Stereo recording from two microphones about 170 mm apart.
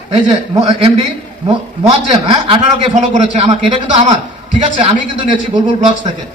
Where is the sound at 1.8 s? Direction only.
35° right (ahead or behind).